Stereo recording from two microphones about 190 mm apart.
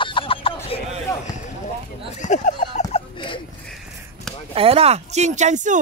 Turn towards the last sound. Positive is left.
turn(degrees=-40)  # may be behind; listen again after turning